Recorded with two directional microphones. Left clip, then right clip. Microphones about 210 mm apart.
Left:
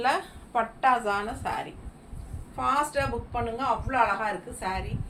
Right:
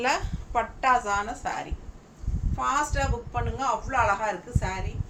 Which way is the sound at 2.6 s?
15° right (ahead or behind).